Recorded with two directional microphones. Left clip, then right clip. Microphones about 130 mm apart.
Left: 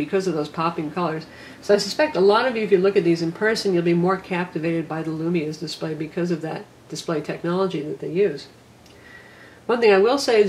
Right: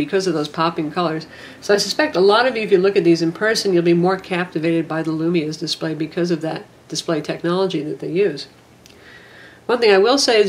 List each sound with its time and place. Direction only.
0.1 s speech: 25° right (ahead or behind)
9.7 s speech: 25° right (ahead or behind)